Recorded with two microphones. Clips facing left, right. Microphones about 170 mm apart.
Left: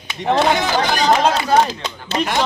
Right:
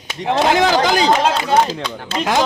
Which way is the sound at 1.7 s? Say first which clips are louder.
Right 3 dB; 70° right (ahead or behind).